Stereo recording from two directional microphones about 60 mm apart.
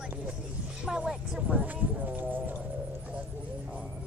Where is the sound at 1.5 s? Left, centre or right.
Right.